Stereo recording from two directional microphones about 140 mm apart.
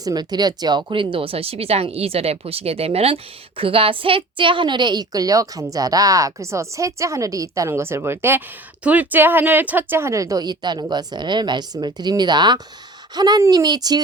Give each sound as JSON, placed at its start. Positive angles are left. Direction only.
{"t": 0.0, "sound": "a woman's voice", "side_deg": -30}